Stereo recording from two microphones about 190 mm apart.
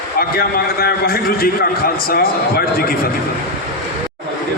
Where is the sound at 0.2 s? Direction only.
55° left (ahead or behind).